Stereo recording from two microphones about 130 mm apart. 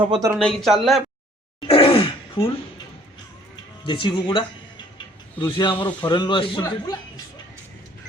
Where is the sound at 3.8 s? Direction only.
40° left (ahead or behind).